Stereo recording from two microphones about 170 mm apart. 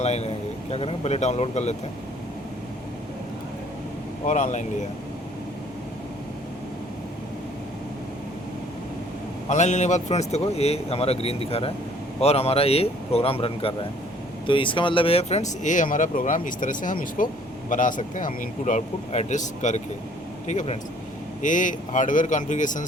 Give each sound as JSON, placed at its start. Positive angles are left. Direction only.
{"t": 0.0, "sound": "a man's voice", "side_deg": 40}
{"t": 4.3, "sound": "speech", "side_deg": 45}
{"t": 9.5, "sound": "speech", "side_deg": 45}